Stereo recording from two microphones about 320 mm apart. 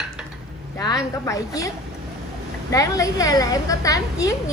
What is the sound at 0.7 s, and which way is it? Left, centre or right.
Speech, centre.